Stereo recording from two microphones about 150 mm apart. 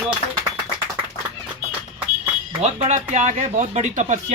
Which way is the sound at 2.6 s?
50° right (ahead or behind).